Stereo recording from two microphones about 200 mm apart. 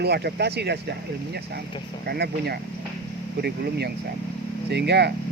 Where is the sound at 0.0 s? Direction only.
55° right (ahead or behind).